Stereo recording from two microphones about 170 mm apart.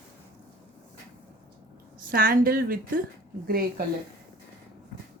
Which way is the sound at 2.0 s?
55° right (ahead or behind).